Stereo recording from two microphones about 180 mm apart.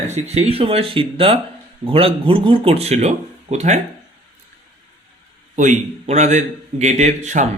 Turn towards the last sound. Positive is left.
turn(degrees=-40)  # may be behind; listen again after turning